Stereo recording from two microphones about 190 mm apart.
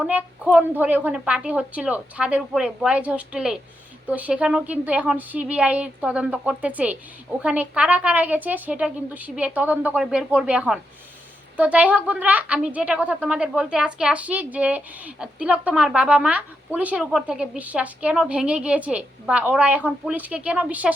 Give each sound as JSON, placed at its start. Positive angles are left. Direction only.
{"t": 0.0, "sound": "a woman's voice", "side_deg": -5}